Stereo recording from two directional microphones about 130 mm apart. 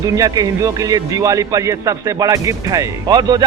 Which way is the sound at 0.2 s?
30° right (ahead or behind).